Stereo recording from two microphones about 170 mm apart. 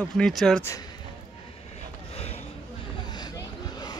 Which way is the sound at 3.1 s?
25° left (ahead or behind).